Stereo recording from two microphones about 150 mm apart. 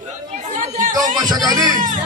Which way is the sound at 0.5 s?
60° right (ahead or behind).